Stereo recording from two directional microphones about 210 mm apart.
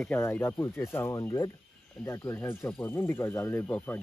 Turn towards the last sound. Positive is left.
turn(degrees=10)  # may be behind; listen again after turning